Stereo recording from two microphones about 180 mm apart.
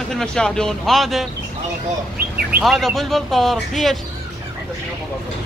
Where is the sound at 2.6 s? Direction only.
Centre (ahead or behind).